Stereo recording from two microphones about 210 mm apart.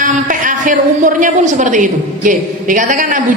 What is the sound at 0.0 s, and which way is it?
A woman's voice, 40° right (ahead or behind).